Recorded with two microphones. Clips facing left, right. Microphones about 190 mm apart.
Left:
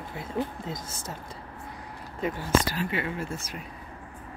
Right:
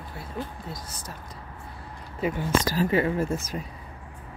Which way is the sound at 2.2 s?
10° right (ahead or behind).